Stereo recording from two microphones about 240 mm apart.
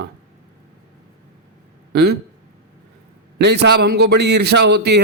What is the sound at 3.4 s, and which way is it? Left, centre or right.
Speech, right.